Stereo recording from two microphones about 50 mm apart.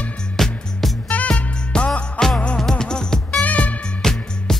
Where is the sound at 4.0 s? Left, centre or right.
Centre.